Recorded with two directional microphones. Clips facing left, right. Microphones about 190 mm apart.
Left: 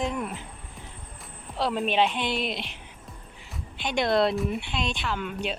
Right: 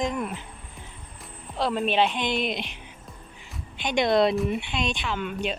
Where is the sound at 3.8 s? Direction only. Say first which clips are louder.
Right 2 dB; 5° left (ahead or behind).